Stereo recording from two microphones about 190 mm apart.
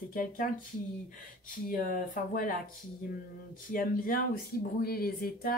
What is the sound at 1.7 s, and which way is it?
Speech, 45° left (ahead or behind).